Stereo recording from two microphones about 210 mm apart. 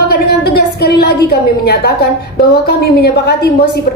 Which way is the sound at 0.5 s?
50° left (ahead or behind).